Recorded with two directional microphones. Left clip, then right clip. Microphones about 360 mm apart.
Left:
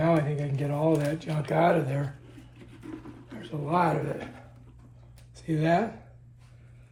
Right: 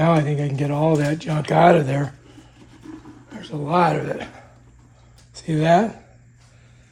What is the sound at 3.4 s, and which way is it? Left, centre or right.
Speech, right.